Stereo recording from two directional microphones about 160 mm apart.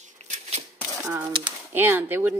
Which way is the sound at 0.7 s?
15° right (ahead or behind).